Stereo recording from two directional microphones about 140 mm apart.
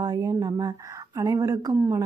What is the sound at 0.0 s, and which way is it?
A woman's voice, 30° right (ahead or behind).